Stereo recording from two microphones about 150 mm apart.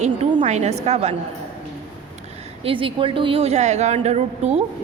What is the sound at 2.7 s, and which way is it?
A woman's voice, 35° right (ahead or behind).